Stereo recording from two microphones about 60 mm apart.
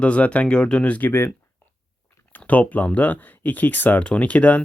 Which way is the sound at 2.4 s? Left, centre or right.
Left.